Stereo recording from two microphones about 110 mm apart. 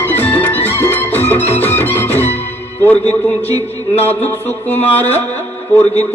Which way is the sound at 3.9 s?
15° left (ahead or behind).